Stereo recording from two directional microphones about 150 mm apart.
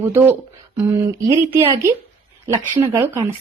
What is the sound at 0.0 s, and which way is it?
Speech, 15° right (ahead or behind).